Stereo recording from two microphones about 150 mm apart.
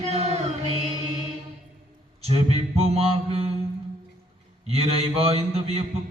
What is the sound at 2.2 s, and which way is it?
Mantra, 45° right (ahead or behind).